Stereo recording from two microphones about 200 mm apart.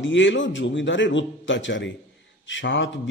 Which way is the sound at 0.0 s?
65° left (ahead or behind).